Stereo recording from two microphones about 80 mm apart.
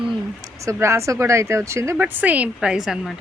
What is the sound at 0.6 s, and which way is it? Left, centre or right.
Speech, right.